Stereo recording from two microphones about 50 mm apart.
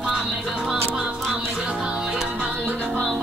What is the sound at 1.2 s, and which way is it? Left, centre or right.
Music, centre.